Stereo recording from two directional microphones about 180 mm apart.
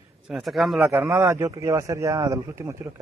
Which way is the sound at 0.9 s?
15° right (ahead or behind).